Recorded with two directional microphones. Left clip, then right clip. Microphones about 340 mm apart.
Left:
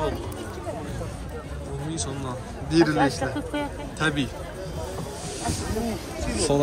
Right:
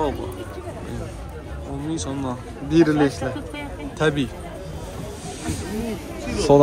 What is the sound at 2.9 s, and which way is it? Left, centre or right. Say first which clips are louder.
Speech: right 2 dB; left.